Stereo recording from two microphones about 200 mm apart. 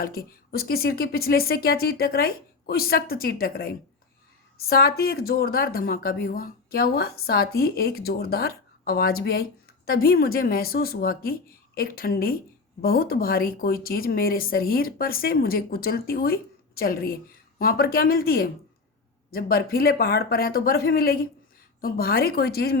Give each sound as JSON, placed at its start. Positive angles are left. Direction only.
{"t": 0.0, "sound": "speech", "side_deg": 50}